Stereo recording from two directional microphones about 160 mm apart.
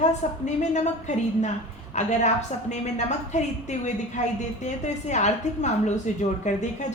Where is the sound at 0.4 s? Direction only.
45° left (ahead or behind).